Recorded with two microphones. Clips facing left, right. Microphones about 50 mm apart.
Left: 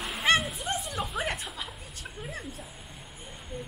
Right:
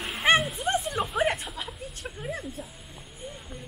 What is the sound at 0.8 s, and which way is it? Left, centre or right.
Chuckle, centre.